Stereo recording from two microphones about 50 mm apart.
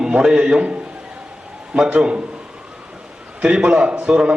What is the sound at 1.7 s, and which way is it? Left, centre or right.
Speech, centre.